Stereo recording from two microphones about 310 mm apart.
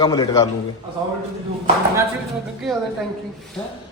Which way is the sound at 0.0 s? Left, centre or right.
Centre.